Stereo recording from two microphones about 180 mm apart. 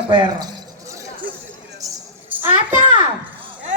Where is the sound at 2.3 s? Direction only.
10° right (ahead or behind).